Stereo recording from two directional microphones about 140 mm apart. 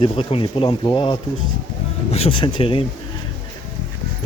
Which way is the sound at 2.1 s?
50° left (ahead or behind).